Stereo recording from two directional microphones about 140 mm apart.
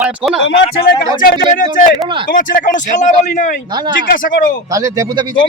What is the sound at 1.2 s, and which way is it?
A man's voice, 70° left (ahead or behind).